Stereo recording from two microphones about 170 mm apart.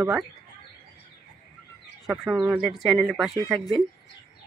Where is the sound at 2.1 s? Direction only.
Centre (ahead or behind).